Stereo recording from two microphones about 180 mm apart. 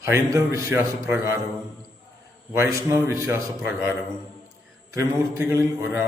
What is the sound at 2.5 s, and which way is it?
Speech, 15° right (ahead or behind).